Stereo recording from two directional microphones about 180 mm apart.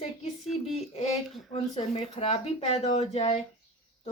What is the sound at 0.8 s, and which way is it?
Speech, 35° left (ahead or behind).